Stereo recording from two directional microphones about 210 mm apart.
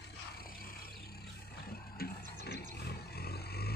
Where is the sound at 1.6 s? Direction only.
45° left (ahead or behind).